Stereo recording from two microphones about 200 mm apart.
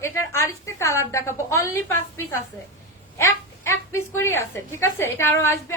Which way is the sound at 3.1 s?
15° left (ahead or behind).